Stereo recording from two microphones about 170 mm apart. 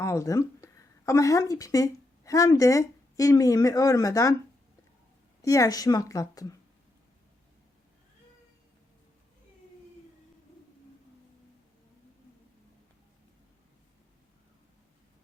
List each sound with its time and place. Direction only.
0.0 s speech: 15° left (ahead or behind)
5.4 s a woman's voice: 20° left (ahead or behind)